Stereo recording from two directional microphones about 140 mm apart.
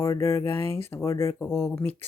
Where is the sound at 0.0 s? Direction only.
20° left (ahead or behind).